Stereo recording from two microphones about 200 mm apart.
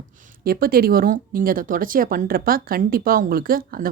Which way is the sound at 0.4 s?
45° right (ahead or behind).